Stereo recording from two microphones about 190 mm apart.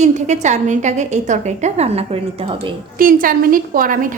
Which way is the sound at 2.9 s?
45° right (ahead or behind).